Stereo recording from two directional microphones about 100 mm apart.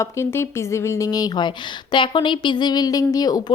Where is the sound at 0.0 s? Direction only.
25° left (ahead or behind).